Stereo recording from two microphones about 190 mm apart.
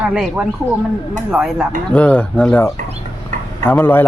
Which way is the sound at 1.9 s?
10° left (ahead or behind).